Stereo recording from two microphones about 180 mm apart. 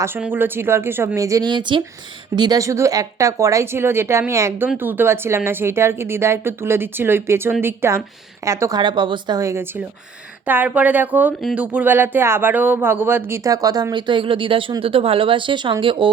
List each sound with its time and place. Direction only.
0.0 s speech: 10° right (ahead or behind); by 16.0 s 30° right (ahead or behind)